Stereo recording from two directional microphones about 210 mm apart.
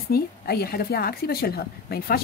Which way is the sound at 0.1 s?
45° left (ahead or behind).